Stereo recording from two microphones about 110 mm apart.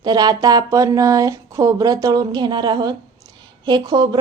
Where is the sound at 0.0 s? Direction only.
40° right (ahead or behind).